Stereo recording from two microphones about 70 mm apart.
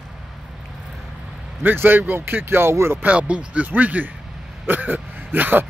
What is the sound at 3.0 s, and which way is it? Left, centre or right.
Speech, centre.